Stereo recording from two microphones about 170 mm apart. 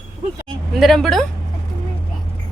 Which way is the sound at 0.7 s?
Centre (ahead or behind).